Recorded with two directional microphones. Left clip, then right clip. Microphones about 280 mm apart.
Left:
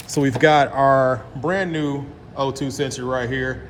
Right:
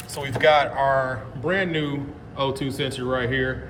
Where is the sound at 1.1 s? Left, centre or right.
Centre.